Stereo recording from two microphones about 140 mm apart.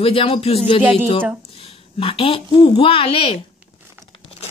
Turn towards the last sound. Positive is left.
turn(degrees=40)  # may be behind; listen again after turning